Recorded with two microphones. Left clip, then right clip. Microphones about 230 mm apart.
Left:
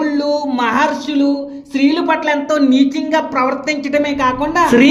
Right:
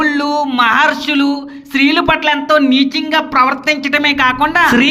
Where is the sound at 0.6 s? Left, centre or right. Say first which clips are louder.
Right 7 dB; right.